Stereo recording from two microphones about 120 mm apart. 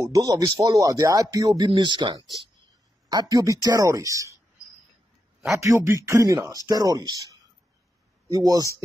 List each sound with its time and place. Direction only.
0.0 s speech: 30° right (ahead or behind)
1.7 s speech: 40° right (ahead or behind)
5.6 s speech: 25° right (ahead or behind)
8.3 s speech: 30° right (ahead or behind)